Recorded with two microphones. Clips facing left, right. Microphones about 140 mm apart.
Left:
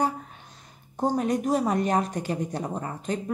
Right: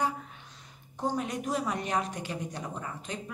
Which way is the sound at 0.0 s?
40° left (ahead or behind).